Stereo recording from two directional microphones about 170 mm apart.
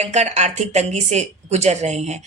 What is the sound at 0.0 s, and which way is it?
A woman's voice, 40° right (ahead or behind).